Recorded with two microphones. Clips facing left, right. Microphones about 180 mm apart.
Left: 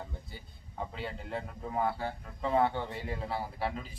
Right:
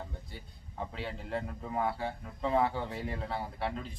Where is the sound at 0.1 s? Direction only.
Centre (ahead or behind).